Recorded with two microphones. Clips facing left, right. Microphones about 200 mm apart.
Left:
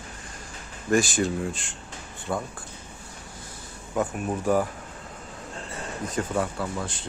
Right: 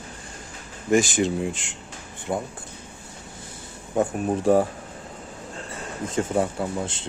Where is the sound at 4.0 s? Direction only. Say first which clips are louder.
Right 4 dB; 30° right (ahead or behind).